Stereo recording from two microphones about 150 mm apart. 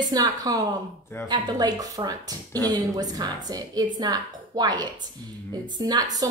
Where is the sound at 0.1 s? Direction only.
25° right (ahead or behind).